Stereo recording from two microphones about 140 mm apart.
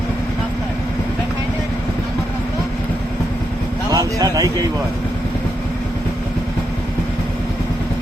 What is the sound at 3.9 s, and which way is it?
Speech, 25° right (ahead or behind).